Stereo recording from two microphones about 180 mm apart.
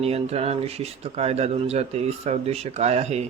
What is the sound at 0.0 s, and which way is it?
Speech, 35° right (ahead or behind).